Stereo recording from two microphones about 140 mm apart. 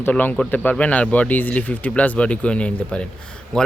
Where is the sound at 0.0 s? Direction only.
15° left (ahead or behind).